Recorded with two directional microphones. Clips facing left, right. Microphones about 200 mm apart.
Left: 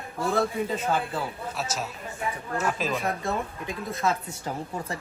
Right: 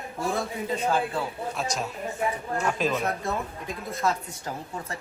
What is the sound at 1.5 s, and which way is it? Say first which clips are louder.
Speech: right 2 dB; 5° left (ahead or behind).